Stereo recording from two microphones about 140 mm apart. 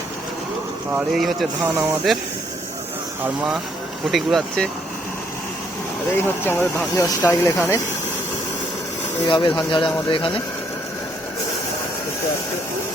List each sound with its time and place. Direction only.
1.1 s speech: centre (ahead or behind)
1.6 s speech: 15° right (ahead or behind)
4.1 s speech: centre (ahead or behind)
6.1 s speech: 15° left (ahead or behind)
9.2 s speech: 30° left (ahead or behind)